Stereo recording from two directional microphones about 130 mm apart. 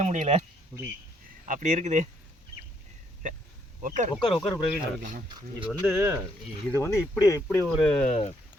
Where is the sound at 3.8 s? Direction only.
75° right (ahead or behind).